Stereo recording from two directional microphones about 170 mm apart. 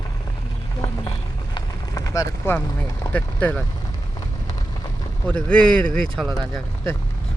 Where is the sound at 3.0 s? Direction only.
10° left (ahead or behind).